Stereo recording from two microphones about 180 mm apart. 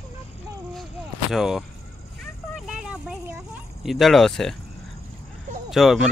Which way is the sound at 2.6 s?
Centre (ahead or behind).